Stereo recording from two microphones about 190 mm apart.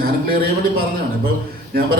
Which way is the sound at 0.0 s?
50° right (ahead or behind).